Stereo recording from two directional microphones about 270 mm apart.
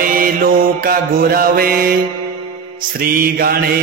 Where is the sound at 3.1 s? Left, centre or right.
Right.